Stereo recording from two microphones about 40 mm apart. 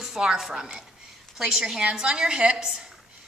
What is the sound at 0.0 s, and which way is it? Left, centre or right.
A woman's voice, centre.